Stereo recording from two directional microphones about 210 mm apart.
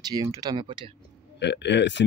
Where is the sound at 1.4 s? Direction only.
55° left (ahead or behind).